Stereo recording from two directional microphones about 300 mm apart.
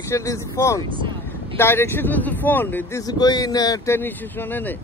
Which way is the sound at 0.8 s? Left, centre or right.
Centre.